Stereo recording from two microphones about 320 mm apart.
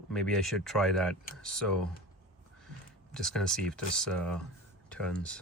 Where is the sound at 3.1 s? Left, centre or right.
Centre.